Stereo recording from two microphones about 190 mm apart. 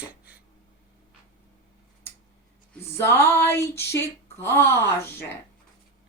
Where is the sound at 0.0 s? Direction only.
5° right (ahead or behind).